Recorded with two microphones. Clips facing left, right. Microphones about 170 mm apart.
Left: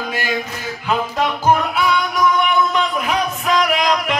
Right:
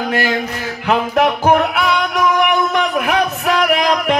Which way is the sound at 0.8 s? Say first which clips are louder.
Right 5 dB; 70° right (ahead or behind).